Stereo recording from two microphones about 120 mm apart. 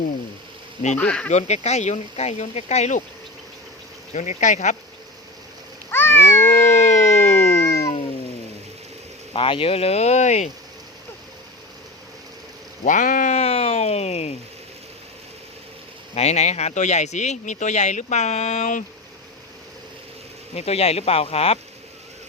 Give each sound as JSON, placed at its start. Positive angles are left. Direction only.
{"t": 0.9, "sound": "speech", "side_deg": 10}
{"t": 1.3, "sound": "speech", "side_deg": 70}
{"t": 4.1, "sound": "speech", "side_deg": 85}
{"t": 5.9, "sound": "cat", "side_deg": 20}
{"t": 6.7, "sound": "a sound", "side_deg": 75}
{"t": 7.6, "sound": "a sound", "side_deg": 25}
{"t": 9.3, "sound": "speech", "side_deg": 50}
{"t": 12.8, "sound": "speech", "side_deg": 90}
{"t": 16.1, "sound": "speech", "side_deg": 65}
{"t": 20.6, "sound": "speech", "side_deg": 60}